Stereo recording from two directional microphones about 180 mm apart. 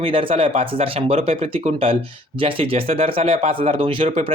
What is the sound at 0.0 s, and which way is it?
Speech, 30° right (ahead or behind).